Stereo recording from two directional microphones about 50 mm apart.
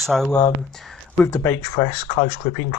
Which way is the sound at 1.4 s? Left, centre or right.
Left.